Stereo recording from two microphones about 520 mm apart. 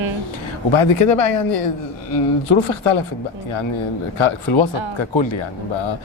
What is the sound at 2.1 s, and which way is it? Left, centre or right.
Speech, left.